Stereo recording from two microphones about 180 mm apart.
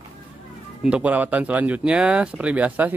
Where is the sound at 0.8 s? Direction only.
5° right (ahead or behind).